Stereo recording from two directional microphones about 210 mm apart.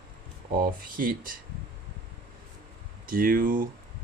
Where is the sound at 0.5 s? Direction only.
40° right (ahead or behind).